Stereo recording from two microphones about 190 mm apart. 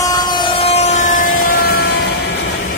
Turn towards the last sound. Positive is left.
turn(degrees=55)  # may be behind; listen again after turning